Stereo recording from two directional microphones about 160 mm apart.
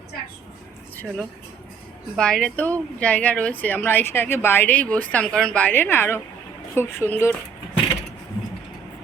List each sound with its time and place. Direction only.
0.9 s speech: 5° left (ahead or behind)